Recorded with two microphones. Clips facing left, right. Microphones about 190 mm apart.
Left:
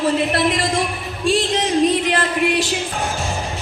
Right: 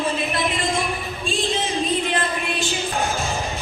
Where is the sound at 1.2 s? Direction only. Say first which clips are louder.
Left 7 dB; 80° left.